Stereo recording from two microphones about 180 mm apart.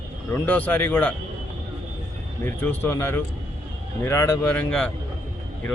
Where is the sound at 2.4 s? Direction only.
10° left (ahead or behind).